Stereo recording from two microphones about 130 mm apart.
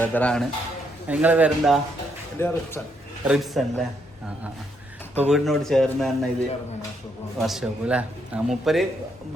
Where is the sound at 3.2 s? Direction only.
5° right (ahead or behind).